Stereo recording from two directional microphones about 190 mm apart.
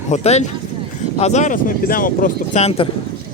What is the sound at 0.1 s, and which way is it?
Speech, 35° left (ahead or behind).